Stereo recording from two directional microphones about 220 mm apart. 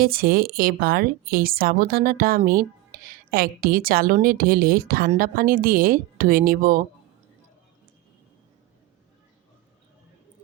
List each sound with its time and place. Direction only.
0.0 s speech: 40° right (ahead or behind)